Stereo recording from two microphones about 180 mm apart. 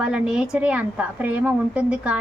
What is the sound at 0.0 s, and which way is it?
A woman's voice, 5° right (ahead or behind).